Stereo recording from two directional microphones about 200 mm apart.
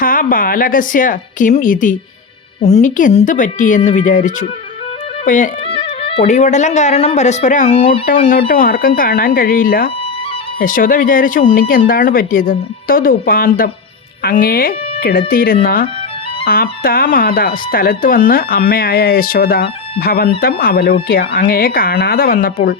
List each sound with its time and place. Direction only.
0.0 s speech: 45° left (ahead or behind)
5.6 s speech: 25° left (ahead or behind); by 22.7 s 45° left (ahead or behind)